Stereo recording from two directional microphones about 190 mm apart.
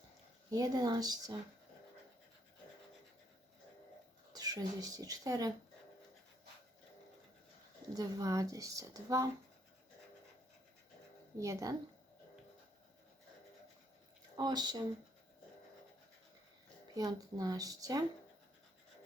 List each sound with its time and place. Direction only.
0.5 s speech: 20° right (ahead or behind)
4.3 s speech: 20° right (ahead or behind)
7.9 s a woman's voice: 20° right (ahead or behind)
11.3 s a woman's voice: 15° right (ahead or behind)
14.3 s speech: 20° right (ahead or behind)
16.9 s speech: 20° right (ahead or behind)